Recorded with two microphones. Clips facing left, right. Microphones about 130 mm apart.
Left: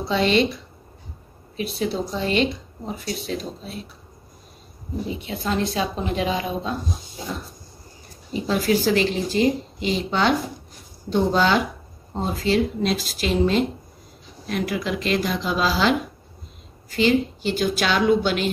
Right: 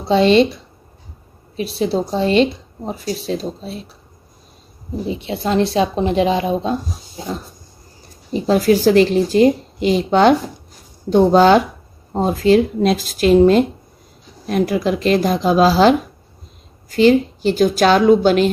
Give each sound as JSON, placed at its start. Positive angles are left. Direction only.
{"t": 0.1, "sound": "speech", "side_deg": -30}
{"t": 1.6, "sound": "a woman's voice", "side_deg": -30}
{"t": 5.2, "sound": "speech", "side_deg": -35}
{"t": 8.3, "sound": "a woman's voice", "side_deg": -40}